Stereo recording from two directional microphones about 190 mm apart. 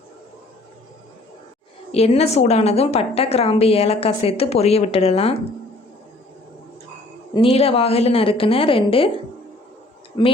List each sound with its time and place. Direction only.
1.9 s a woman's voice: 30° left (ahead or behind)
7.3 s a woman's voice: 30° left (ahead or behind)